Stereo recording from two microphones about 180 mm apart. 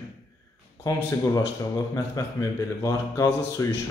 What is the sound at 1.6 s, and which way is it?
A man's voice, 20° left (ahead or behind).